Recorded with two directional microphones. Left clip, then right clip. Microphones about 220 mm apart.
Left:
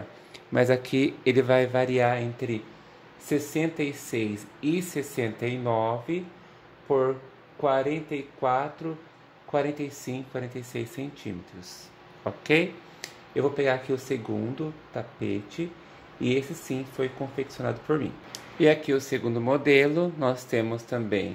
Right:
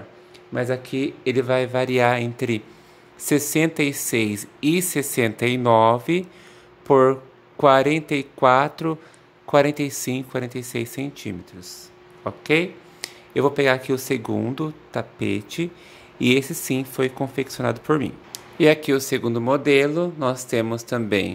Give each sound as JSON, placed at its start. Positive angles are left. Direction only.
{"t": 0.5, "sound": "speech", "side_deg": 5}
{"t": 12.2, "sound": "a sound", "side_deg": -15}
{"t": 13.3, "sound": "speech", "side_deg": -25}
{"t": 20.9, "sound": "speech", "side_deg": -25}